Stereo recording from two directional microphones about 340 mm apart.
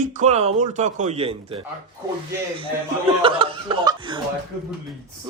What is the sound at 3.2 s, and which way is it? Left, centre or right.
Speech, centre.